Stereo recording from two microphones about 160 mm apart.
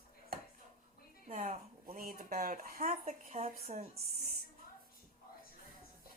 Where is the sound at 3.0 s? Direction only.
40° right (ahead or behind).